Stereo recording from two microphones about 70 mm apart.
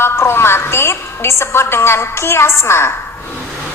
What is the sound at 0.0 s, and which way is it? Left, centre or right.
A woman's voice, left.